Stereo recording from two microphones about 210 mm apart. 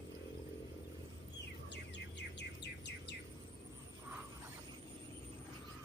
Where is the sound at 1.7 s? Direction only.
55° left (ahead or behind).